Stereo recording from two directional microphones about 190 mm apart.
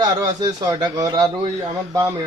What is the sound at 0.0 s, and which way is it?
Speech, 20° right (ahead or behind).